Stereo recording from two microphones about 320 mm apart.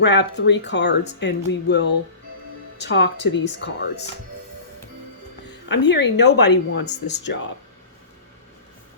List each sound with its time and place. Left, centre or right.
0.0 s speech: left
5.6 s speech: left